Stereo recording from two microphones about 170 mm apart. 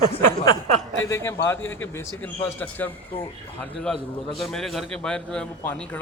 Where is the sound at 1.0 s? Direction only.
15° left (ahead or behind).